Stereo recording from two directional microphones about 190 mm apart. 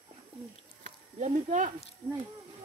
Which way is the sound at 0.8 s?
40° right (ahead or behind).